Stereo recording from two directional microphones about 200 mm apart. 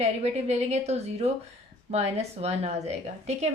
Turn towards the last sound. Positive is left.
turn(degrees=-35)  # may be behind; listen again after turning